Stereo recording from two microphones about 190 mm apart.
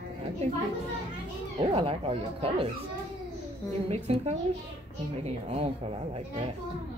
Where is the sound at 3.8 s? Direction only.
35° right (ahead or behind).